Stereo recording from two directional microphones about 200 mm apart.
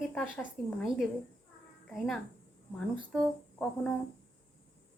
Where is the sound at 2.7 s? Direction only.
Centre (ahead or behind).